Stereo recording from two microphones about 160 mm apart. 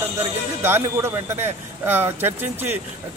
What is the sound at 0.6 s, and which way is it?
A man's voice, 15° right (ahead or behind).